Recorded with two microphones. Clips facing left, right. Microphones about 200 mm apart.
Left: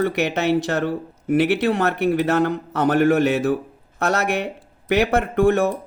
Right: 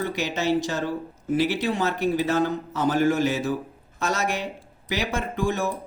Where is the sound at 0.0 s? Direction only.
65° left (ahead or behind).